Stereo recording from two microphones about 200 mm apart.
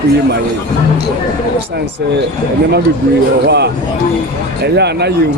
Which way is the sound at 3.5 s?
55° right (ahead or behind).